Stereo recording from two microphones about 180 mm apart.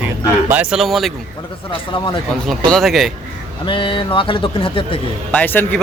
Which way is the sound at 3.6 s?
25° left (ahead or behind).